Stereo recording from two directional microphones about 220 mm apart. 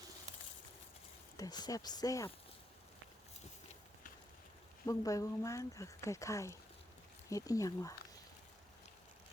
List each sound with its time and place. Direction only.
1.4 s speech: 20° left (ahead or behind)
4.9 s speech: 15° left (ahead or behind)